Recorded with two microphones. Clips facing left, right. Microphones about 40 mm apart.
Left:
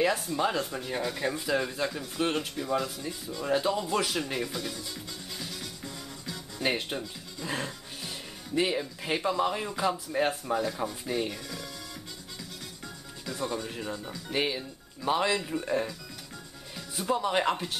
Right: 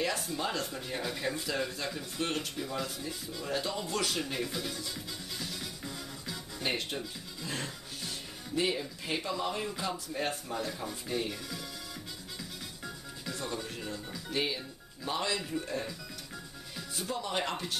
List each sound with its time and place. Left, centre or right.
0.4 s speech: centre
1.4 s speech: centre
1.9 s speech: centre
3.4 s speech: centre
4.2 s music: centre
6.6 s speech: centre
7.4 s music: centre
8.5 s speech: centre
12.4 s music: centre
13.4 s speech: centre
16.9 s speech: centre